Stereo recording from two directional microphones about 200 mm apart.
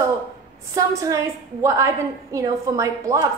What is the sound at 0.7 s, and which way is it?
A woman's voice, 15° right (ahead or behind).